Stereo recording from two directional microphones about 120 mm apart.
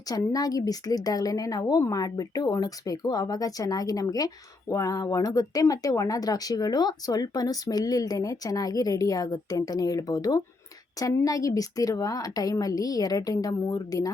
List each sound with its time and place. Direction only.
0.1 s a woman's voice: 30° left (ahead or behind)